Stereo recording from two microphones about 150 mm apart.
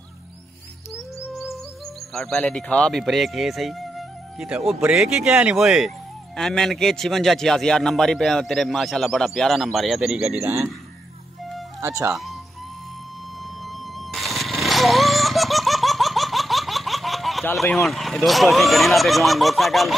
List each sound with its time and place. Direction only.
2.1 s speech: 5° left (ahead or behind)
10.4 s speech: 20° right (ahead or behind)
11.8 s speech: 20° right (ahead or behind)
14.1 s laughter: centre (ahead or behind)
17.8 s speech: centre (ahead or behind)